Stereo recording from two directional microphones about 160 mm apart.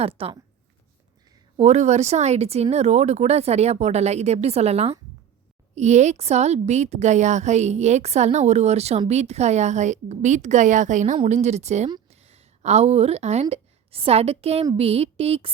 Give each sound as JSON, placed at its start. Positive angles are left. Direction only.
{"t": 0.2, "sound": "speech", "side_deg": -35}
{"t": 1.5, "sound": "speech", "side_deg": -45}